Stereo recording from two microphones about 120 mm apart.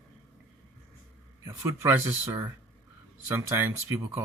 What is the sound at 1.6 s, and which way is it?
Speech, 20° right (ahead or behind).